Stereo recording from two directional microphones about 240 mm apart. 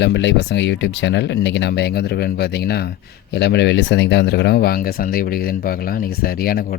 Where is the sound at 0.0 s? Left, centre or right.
Left.